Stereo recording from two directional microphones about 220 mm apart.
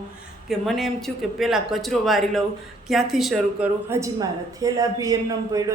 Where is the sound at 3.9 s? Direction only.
15° right (ahead or behind).